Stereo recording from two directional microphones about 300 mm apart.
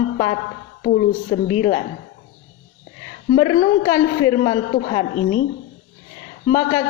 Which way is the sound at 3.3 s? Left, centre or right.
Centre.